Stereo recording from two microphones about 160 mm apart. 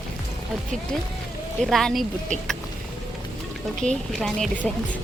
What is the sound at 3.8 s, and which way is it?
Speech, 5° left (ahead or behind).